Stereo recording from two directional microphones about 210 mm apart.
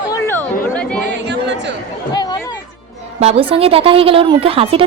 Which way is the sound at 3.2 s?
30° right (ahead or behind).